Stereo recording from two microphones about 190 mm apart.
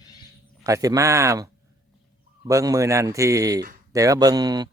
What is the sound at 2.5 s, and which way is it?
Speech, 15° right (ahead or behind).